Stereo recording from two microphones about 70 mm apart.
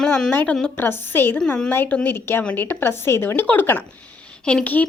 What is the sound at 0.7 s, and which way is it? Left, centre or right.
Speech, left.